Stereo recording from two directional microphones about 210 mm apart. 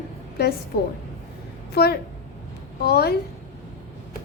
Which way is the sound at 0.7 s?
45° left (ahead or behind).